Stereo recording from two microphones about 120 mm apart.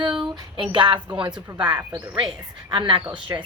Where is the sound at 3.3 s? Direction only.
30° right (ahead or behind).